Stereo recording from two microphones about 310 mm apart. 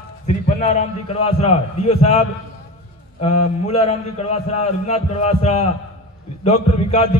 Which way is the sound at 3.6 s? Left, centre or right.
Centre.